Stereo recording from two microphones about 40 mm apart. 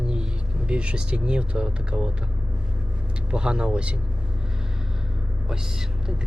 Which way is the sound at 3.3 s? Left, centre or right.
Right.